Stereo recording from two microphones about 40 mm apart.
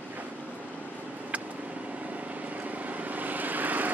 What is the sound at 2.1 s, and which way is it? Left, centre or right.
Vehicle, right.